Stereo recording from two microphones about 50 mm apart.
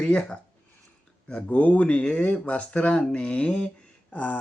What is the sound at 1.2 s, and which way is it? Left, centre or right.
Speech, left.